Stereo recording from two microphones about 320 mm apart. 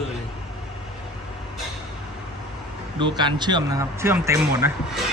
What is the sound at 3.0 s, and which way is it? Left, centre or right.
Speech, centre.